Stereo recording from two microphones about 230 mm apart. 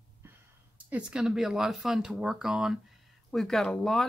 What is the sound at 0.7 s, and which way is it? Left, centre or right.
Speech, centre.